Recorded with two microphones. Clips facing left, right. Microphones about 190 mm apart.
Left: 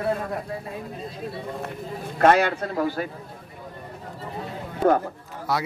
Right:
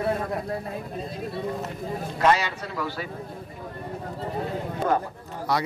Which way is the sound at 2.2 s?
55° left (ahead or behind).